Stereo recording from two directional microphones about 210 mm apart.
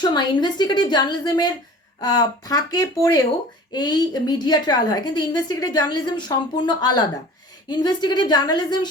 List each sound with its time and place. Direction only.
0.0 s a woman's voice: 20° left (ahead or behind)